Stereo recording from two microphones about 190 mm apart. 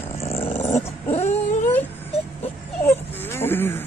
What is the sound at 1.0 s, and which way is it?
Baby cry, 35° left (ahead or behind).